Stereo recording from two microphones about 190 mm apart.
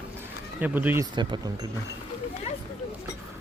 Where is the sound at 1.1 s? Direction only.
20° right (ahead or behind).